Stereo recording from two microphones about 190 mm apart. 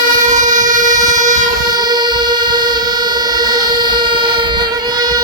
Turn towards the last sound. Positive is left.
turn(degrees=-20)  # may be behind; listen again after turning